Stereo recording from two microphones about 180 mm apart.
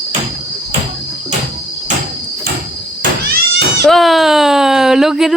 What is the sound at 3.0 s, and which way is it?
Cat, 70° right (ahead or behind).